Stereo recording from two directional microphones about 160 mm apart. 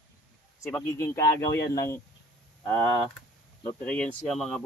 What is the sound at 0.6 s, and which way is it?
Speech, 15° left (ahead or behind).